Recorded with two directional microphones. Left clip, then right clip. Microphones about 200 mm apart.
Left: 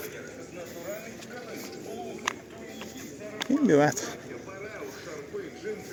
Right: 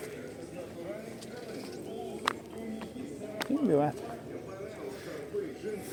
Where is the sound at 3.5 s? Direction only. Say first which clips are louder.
Left 6 dB; 35° left (ahead or behind).